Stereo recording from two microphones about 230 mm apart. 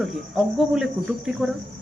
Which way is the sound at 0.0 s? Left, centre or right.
Centre.